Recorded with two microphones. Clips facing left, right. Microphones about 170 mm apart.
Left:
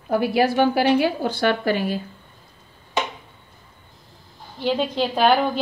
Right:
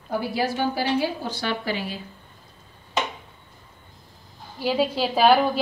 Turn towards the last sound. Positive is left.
turn(degrees=-5)  # may be behind; listen again after turning